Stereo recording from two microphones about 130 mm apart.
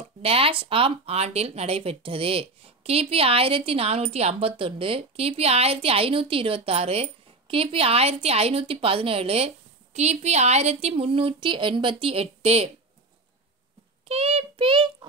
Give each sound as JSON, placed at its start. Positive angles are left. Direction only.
{"t": 0.2, "sound": "speech", "side_deg": -50}
{"t": 14.0, "sound": "a child's voice", "side_deg": -50}